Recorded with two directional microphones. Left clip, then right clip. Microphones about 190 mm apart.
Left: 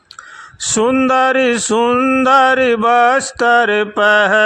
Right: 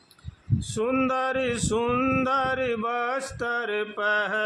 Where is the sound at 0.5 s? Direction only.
50° left (ahead or behind).